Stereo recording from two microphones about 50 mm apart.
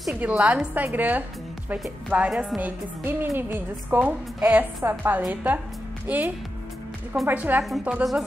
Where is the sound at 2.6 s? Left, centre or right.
Right.